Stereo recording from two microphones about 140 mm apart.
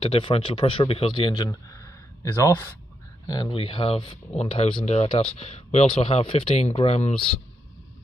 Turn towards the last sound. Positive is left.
turn(degrees=45)  # may be behind; listen again after turning